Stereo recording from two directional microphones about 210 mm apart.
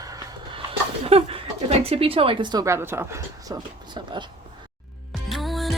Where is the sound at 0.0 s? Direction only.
15° right (ahead or behind).